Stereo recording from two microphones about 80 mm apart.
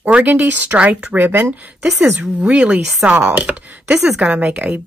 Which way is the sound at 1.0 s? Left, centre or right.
Centre.